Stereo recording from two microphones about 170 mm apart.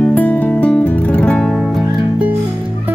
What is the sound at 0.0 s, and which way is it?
Music, 10° left (ahead or behind).